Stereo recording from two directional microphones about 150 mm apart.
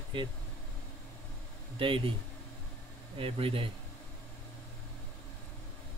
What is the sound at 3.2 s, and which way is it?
Speech, 40° right (ahead or behind).